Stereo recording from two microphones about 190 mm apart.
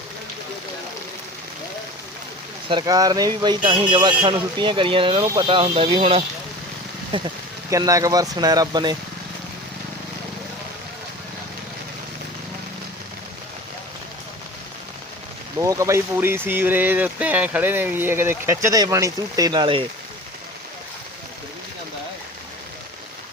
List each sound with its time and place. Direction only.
2.6 s a man's voice: 20° right (ahead or behind)
15.5 s speech: 15° right (ahead or behind)